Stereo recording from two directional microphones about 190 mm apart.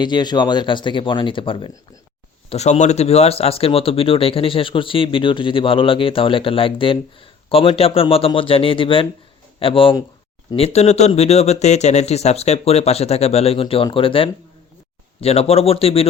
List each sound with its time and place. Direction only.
0.0 s speech: 20° left (ahead or behind)